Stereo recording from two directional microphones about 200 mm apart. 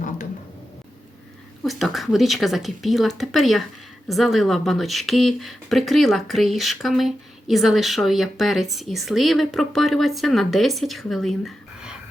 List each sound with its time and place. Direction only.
1.6 s speech: centre (ahead or behind)